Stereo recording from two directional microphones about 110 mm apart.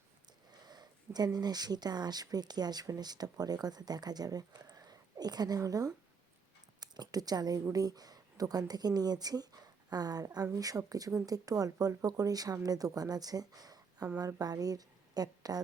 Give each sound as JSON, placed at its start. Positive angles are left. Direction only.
{"t": 0.6, "sound": "a woman's voice", "side_deg": -40}